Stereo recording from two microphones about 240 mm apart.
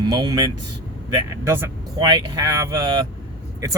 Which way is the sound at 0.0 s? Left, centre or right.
Centre.